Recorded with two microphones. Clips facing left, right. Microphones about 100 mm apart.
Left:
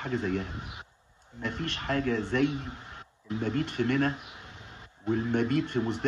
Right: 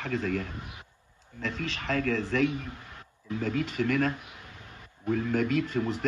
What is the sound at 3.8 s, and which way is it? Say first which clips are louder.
A man's voice: even; 20° left (ahead or behind).